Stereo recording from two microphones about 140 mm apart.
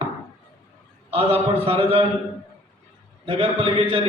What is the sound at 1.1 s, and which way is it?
Speech, 40° right (ahead or behind).